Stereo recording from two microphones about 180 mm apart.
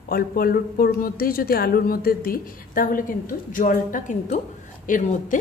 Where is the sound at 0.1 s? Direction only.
55° left (ahead or behind).